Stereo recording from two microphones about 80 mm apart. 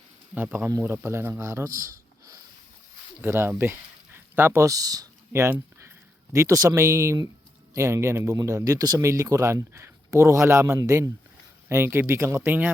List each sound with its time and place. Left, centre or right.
0.8 s speech: right
3.6 s a sound: right
4.7 s speech: right
5.3 s speech: right
9.0 s speech: right
10.8 s speech: right
11.7 s speech: right